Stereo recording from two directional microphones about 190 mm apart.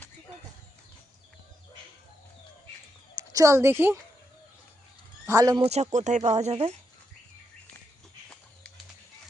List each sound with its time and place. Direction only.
3.2 s a woman's voice: 20° right (ahead or behind)
5.2 s speech: 15° right (ahead or behind)
5.6 s speech: 35° right (ahead or behind)